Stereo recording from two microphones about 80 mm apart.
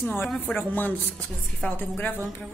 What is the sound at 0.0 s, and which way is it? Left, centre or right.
A woman's voice, left.